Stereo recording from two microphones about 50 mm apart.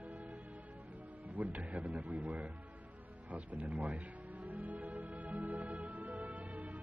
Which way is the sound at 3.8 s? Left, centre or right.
Right.